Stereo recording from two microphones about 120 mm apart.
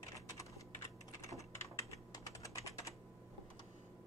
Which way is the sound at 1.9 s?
30° left (ahead or behind).